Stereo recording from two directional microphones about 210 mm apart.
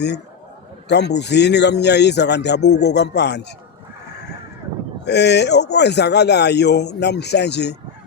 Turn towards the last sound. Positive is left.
turn(degrees=55)  # may be behind; listen again after turning